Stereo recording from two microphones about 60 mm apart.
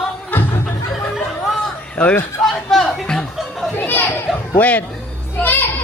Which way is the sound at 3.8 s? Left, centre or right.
Left.